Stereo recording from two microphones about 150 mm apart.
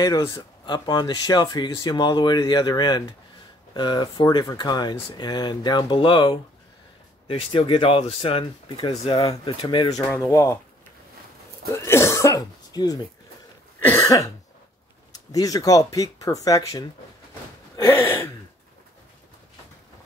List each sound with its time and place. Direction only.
0.0 s speech: 25° left (ahead or behind)
11.7 s speech: 15° left (ahead or behind)
13.7 s cough: 15° left (ahead or behind)
15.1 s speech: 25° left (ahead or behind)